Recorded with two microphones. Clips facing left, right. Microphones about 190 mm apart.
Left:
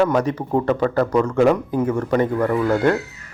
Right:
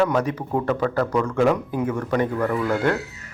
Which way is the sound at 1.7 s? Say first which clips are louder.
Left 4 dB; 40° left (ahead or behind).